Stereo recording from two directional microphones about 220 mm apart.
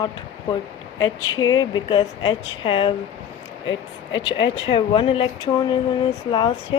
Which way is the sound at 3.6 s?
60° left (ahead or behind).